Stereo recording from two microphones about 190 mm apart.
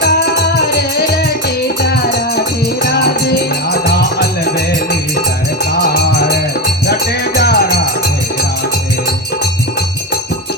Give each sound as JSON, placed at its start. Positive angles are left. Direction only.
{"t": 3.0, "sound": "music", "side_deg": 60}
{"t": 7.3, "sound": "music", "side_deg": 55}